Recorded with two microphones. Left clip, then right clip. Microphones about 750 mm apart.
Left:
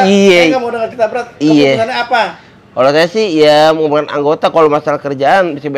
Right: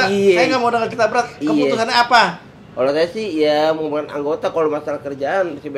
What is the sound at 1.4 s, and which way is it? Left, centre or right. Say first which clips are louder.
Speech: left 13 dB; left.